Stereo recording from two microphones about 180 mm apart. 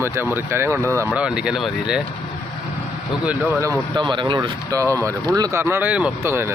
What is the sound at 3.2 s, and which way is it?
Speech, 10° right (ahead or behind).